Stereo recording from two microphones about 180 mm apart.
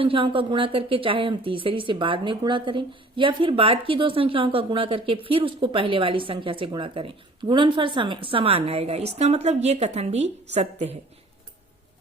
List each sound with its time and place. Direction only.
0.0 s a woman's voice: 30° right (ahead or behind)